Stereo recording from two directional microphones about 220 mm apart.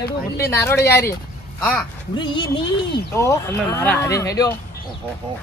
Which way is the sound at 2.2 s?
20° left (ahead or behind).